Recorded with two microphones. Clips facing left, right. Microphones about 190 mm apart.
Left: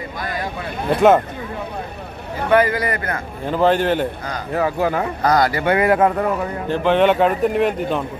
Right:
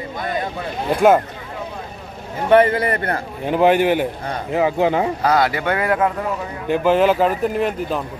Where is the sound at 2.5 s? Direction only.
25° right (ahead or behind).